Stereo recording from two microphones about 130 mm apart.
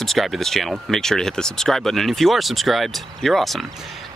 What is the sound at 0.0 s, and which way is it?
Speech, centre (ahead or behind).